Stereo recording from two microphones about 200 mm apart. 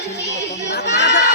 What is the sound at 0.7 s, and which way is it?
Crowd, 60° left (ahead or behind).